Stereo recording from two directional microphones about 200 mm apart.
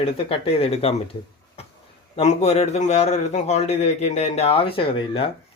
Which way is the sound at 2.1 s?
35° left (ahead or behind).